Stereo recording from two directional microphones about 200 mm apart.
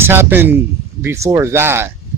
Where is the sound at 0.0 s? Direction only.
10° right (ahead or behind).